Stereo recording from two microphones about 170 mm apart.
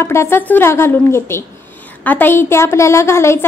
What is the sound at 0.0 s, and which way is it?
A woman's voice, 15° left (ahead or behind).